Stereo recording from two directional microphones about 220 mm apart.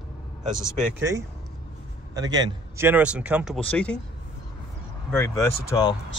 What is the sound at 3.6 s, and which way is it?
Speech, 5° left (ahead or behind).